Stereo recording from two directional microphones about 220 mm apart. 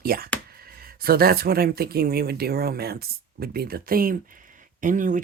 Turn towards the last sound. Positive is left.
turn(degrees=-35)  # may be behind; listen again after turning